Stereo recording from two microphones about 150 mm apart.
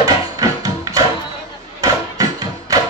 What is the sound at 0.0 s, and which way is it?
Music, 25° right (ahead or behind).